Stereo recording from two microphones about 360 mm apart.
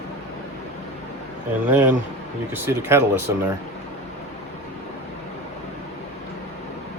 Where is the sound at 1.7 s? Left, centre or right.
Centre.